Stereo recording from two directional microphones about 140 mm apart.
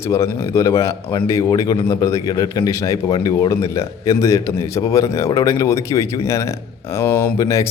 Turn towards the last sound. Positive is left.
turn(degrees=20)  # may be behind; listen again after turning